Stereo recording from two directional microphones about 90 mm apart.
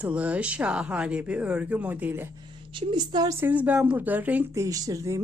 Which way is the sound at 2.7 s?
60° right (ahead or behind).